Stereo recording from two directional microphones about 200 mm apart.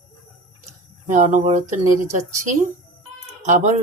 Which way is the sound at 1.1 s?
40° right (ahead or behind).